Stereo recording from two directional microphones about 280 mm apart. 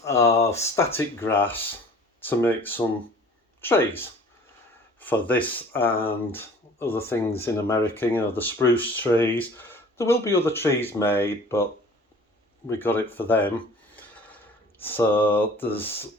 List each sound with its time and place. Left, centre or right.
0.0 s speech: centre
14.8 s speech: centre